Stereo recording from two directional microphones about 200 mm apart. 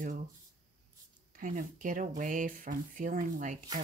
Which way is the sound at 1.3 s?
45° right (ahead or behind).